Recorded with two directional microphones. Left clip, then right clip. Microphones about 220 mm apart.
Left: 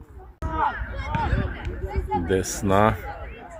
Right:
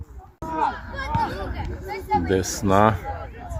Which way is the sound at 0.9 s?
40° right (ahead or behind).